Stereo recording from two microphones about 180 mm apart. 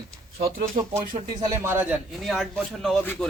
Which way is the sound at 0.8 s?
25° right (ahead or behind).